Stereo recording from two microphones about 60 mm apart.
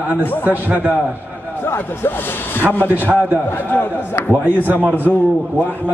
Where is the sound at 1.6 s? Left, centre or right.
Left.